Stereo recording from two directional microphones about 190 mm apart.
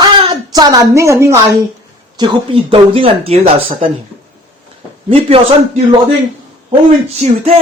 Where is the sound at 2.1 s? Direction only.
25° right (ahead or behind).